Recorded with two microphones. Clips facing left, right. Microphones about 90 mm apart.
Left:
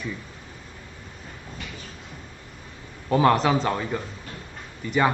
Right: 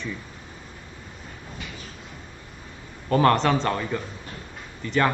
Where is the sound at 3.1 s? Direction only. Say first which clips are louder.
Even; 5° left (ahead or behind).